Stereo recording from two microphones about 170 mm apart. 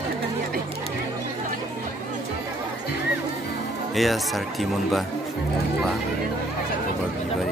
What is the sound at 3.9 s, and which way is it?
Speech, centre (ahead or behind).